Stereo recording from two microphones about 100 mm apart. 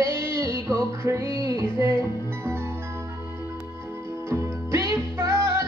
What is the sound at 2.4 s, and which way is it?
Music, 25° right (ahead or behind).